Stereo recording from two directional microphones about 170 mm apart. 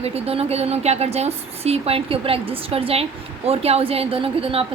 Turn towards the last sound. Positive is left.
turn(degrees=-35)  # may be behind; listen again after turning